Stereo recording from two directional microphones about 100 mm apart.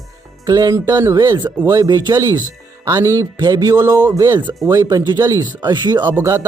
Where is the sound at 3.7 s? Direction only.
35° right (ahead or behind).